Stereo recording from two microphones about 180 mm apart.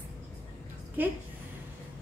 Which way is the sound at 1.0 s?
10° right (ahead or behind).